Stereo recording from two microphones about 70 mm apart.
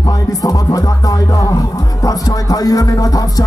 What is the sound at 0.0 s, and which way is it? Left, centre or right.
Music, left.